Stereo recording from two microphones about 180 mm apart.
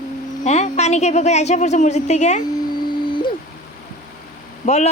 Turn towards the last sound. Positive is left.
turn(degrees=50)  # may be behind; listen again after turning